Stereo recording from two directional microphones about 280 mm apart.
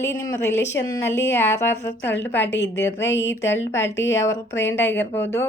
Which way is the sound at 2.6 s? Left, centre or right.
Left.